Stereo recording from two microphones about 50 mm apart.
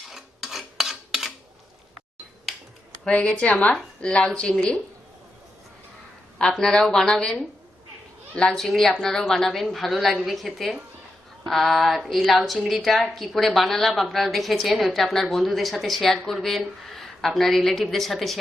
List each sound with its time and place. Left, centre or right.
0.1 s filing: centre
3.1 s speech: left
6.4 s speech: centre
8.5 s a woman's voice: centre